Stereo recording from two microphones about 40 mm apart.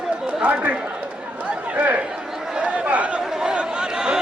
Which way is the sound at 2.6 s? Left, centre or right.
Right.